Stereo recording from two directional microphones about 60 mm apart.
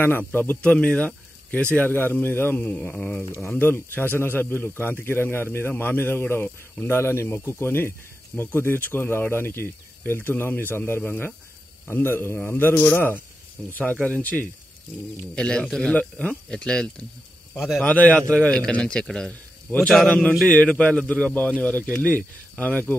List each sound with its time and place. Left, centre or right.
0.0 s a man's voice: left
0.6 s a man's voice: centre; by 2.5 s left
2.5 s a man's voice: centre
3.5 s a man's voice: left
6.9 s a man's voice: left
15.3 s speech: centre
17.6 s a man's voice: centre
17.8 s a man's voice: left
20.4 s a man's voice: left